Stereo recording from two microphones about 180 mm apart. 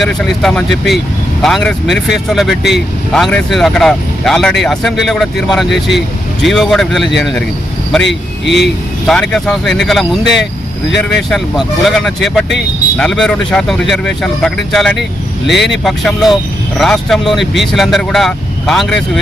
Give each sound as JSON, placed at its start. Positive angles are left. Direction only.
{"t": 0.0, "sound": "speech", "side_deg": 0}
{"t": 8.0, "sound": "speech", "side_deg": 75}
{"t": 9.0, "sound": "speech", "side_deg": 5}